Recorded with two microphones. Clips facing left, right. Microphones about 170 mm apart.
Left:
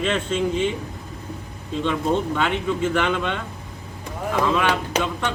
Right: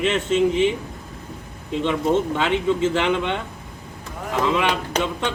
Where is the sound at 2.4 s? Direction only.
25° right (ahead or behind).